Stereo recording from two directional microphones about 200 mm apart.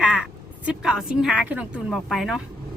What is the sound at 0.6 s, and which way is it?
Speech, 5° right (ahead or behind).